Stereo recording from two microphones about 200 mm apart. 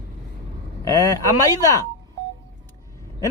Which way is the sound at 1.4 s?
15° left (ahead or behind).